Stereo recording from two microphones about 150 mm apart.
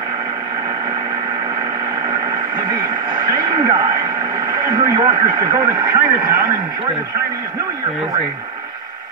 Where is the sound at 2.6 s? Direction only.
30° right (ahead or behind).